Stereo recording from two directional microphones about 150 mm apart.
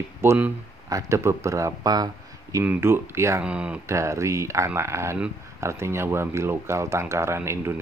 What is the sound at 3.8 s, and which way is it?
Speech, 20° right (ahead or behind).